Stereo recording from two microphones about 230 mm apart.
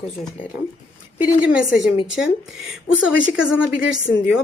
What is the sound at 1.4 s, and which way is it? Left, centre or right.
A woman's voice, centre.